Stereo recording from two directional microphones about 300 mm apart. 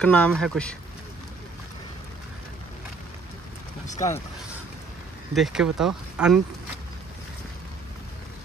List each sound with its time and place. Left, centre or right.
0.0 s speech: centre
3.8 s vehicle: left
5.3 s speech: centre